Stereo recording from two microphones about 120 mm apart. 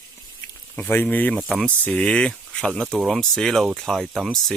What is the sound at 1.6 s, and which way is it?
Speech, 10° left (ahead or behind).